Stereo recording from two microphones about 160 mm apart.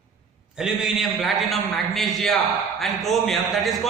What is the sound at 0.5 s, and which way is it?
A man's voice, 5° right (ahead or behind).